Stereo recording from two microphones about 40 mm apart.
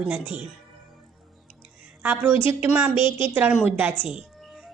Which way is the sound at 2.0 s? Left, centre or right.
Right.